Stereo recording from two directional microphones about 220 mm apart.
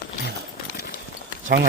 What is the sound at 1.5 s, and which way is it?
Speech, 45° right (ahead or behind).